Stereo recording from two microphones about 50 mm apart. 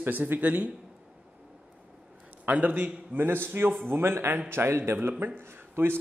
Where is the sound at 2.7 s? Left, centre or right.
Right.